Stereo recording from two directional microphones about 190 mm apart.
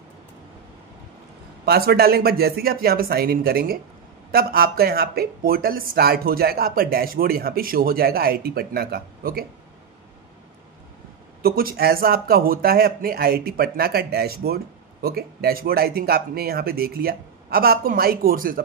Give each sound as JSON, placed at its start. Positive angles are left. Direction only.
{"t": 1.7, "sound": "speech", "side_deg": -55}
{"t": 11.4, "sound": "speech", "side_deg": -50}